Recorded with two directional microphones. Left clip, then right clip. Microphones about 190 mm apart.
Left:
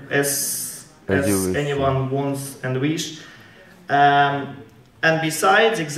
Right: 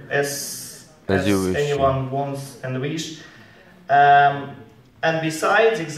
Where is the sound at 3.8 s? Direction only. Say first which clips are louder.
Right 2 dB; 45° left (ahead or behind).